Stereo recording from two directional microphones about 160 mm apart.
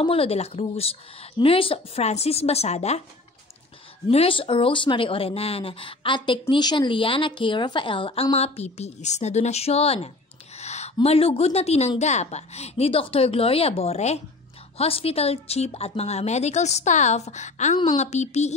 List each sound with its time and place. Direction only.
0.0 s a woman's voice: 35° left (ahead or behind)
4.1 s a woman's voice: 35° left (ahead or behind)